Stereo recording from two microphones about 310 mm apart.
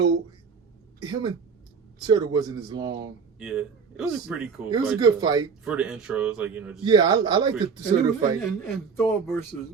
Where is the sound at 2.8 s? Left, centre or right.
Right.